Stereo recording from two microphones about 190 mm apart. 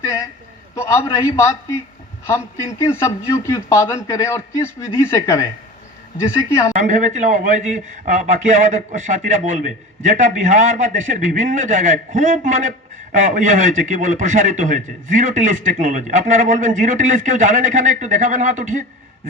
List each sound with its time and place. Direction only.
0.0 s a sound: 15° left (ahead or behind)
0.8 s a man's voice: 15° left (ahead or behind)
6.7 s a man's voice: 40° right (ahead or behind)